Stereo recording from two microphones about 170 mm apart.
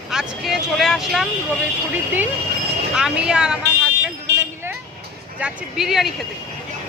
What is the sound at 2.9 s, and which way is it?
Speech, 5° right (ahead or behind).